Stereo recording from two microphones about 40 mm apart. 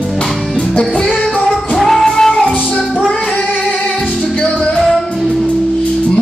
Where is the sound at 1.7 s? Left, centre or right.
Centre.